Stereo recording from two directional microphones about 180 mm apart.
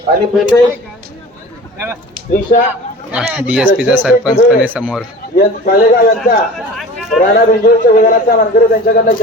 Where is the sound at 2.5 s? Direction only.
50° left (ahead or behind).